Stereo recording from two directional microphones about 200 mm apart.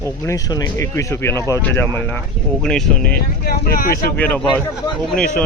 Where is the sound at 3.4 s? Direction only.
45° left (ahead or behind).